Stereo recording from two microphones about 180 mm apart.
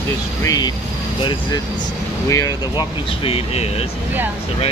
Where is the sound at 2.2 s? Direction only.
20° left (ahead or behind).